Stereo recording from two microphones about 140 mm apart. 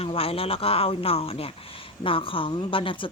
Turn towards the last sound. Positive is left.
turn(degrees=40)  # may be behind; listen again after turning